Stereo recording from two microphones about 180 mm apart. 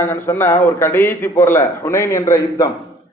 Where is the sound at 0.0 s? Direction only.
15° left (ahead or behind).